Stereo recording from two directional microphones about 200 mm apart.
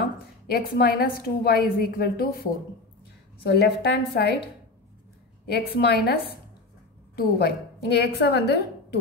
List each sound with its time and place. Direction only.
0.5 s a woman's voice: 50° left (ahead or behind)
3.4 s a woman's voice: 55° left (ahead or behind)
5.5 s a woman's voice: 55° left (ahead or behind)